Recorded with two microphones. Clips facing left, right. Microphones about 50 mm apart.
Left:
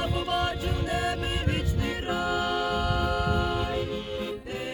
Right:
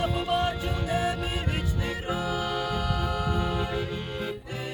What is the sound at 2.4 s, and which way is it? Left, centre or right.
Music, left.